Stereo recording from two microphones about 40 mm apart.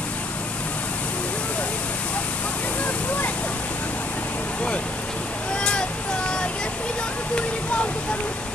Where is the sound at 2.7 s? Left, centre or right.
Left.